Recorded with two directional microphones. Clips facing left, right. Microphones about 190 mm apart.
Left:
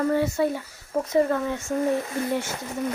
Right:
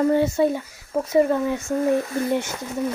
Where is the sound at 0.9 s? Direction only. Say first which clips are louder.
Right 3 dB; 10° right (ahead or behind).